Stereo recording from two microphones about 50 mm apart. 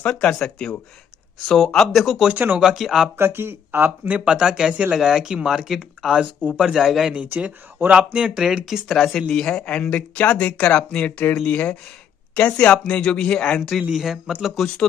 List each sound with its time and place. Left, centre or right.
0.2 s speech: centre
2.3 s speech: right
2.6 s speech: centre
3.2 s speech: right
4.1 s speech: right
4.9 s speech: centre
7.2 s speech: right
8.8 s speech: centre
13.6 s speech: centre